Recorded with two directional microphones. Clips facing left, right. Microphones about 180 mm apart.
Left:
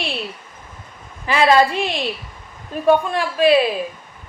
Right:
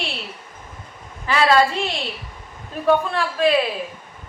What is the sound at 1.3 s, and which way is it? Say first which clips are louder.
Speech: left 2 dB; 15° left (ahead or behind).